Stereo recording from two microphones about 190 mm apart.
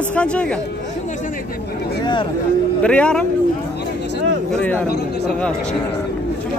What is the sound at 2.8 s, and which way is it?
Speech, 5° left (ahead or behind).